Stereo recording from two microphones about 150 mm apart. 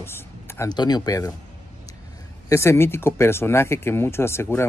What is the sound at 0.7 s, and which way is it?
Speech, 30° left (ahead or behind).